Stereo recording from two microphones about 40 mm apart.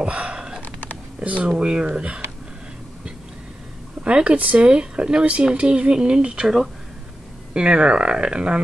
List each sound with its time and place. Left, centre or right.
0.0 s gasp: right
1.2 s speech: right
1.5 s speech: right
4.0 s speech: right
4.6 s speech: right
6.4 s speech: centre
7.5 s speech: right